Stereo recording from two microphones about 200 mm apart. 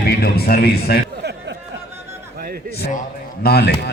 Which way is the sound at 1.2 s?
55° right (ahead or behind).